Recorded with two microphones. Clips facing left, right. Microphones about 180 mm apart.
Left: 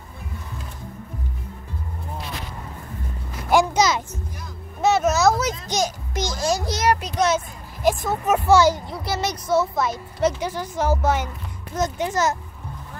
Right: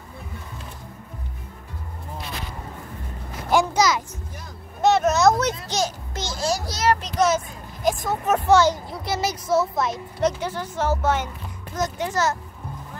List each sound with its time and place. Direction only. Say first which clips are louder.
3.7 s a child's voice: left 1 dB; 25° left (ahead or behind)
4.8 s a sound: right 1 dB; 5° left (ahead or behind)
5.7 s a child's voice: left 1 dB; 15° left (ahead or behind)
7.2 s a child's voice: even; centre (ahead or behind)
10.4 s a child's voice: left 1 dB; 15° left (ahead or behind)
11.7 s a child's voice: left 2 dB; 20° left (ahead or behind)